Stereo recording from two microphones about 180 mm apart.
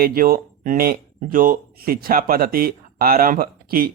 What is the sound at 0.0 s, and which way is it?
Speech, 55° right (ahead or behind).